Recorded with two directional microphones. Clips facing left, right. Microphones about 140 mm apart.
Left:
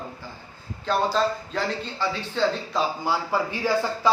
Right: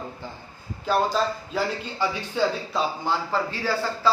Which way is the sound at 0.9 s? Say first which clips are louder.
Even; 5° right (ahead or behind).